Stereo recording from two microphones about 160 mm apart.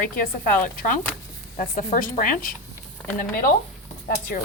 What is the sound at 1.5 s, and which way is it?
Speech, 55° left (ahead or behind).